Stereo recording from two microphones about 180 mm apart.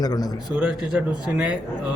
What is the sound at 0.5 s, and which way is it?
Speech, 5° right (ahead or behind).